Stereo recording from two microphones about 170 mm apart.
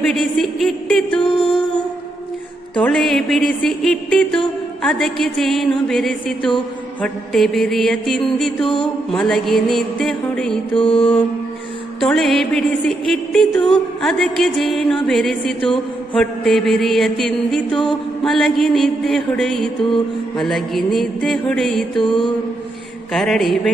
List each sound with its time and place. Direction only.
0.1 s music: centre (ahead or behind)
2.8 s music: centre (ahead or behind)
10.8 s mantra: 30° left (ahead or behind)
12.0 s music: centre (ahead or behind)
15.6 s a sound: 30° left (ahead or behind)
16.2 s music: centre (ahead or behind)
21.9 s mantra: 30° left (ahead or behind)
23.1 s music: centre (ahead or behind)